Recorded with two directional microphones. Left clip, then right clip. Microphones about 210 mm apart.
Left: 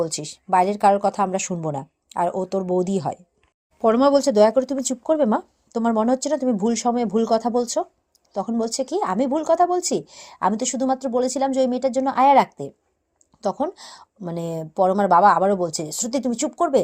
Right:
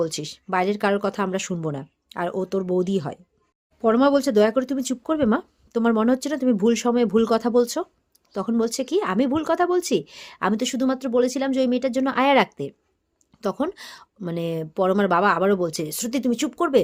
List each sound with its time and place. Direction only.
0.0 s a woman's voice: 10° right (ahead or behind)
3.8 s a woman's voice: 5° left (ahead or behind); by 16.8 s 15° right (ahead or behind)